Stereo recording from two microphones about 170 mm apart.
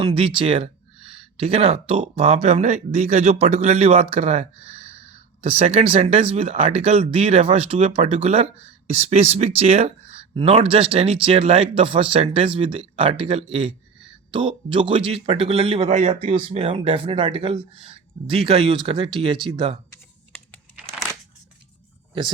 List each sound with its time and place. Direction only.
0.0 s speech: 30° right (ahead or behind)